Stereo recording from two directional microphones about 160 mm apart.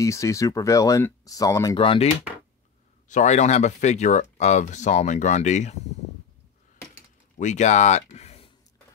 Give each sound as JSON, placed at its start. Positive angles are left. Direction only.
{"t": 0.0, "sound": "speech", "side_deg": 20}
{"t": 1.8, "sound": "speech", "side_deg": 35}
{"t": 3.1, "sound": "speech", "side_deg": 50}
{"t": 7.3, "sound": "speech", "side_deg": 50}